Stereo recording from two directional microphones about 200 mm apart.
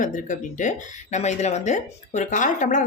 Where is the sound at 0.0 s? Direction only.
40° left (ahead or behind).